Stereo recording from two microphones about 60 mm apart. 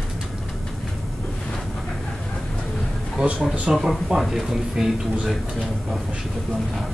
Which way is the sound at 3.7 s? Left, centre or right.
Centre.